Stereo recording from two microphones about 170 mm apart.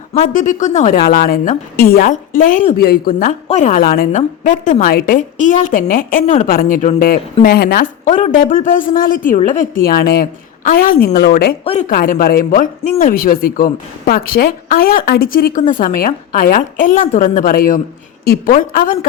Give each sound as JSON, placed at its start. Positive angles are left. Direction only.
{"t": 0.1, "sound": "a woman's voice", "side_deg": 45}
{"t": 0.9, "sound": "speech", "side_deg": 65}
{"t": 2.7, "sound": "speech", "side_deg": 65}
{"t": 4.2, "sound": "a woman's voice", "side_deg": 45}
{"t": 4.8, "sound": "speech", "side_deg": 60}
{"t": 7.4, "sound": "speech", "side_deg": 65}
{"t": 8.5, "sound": "speech", "side_deg": 55}
{"t": 11.6, "sound": "speech", "side_deg": 40}
{"t": 11.9, "sound": "speech", "side_deg": 55}